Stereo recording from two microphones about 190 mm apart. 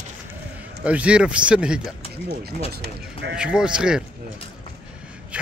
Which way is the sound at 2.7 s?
55° right (ahead or behind).